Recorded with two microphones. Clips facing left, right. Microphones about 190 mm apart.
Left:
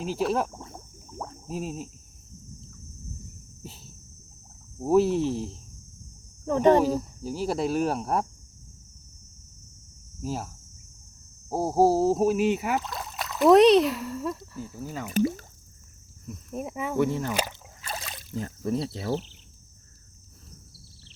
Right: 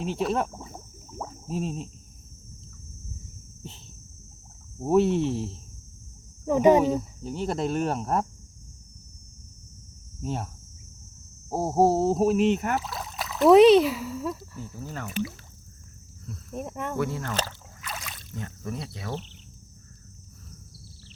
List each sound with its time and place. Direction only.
0.0 s a sound: centre (ahead or behind)
3.6 s cricket: 5° left (ahead or behind)
4.8 s speech: centre (ahead or behind)
6.8 s speech: centre (ahead or behind)
10.2 s speech: 5° left (ahead or behind)
15.1 s speech: 45° left (ahead or behind)
16.5 s speech: 5° left (ahead or behind)
17.0 s speech: 20° left (ahead or behind)
17.8 s rowboat: 35° left (ahead or behind)